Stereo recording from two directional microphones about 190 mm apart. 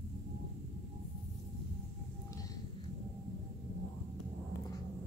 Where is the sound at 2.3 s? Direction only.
20° left (ahead or behind).